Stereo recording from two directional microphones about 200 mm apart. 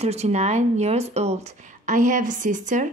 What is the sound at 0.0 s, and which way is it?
A woman's voice, 30° right (ahead or behind).